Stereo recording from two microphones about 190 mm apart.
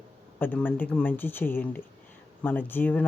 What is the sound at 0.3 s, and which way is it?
Speech, 10° left (ahead or behind).